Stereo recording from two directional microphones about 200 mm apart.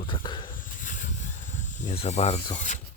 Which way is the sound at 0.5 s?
40° left (ahead or behind).